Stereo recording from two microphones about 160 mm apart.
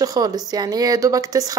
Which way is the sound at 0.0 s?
25° right (ahead or behind).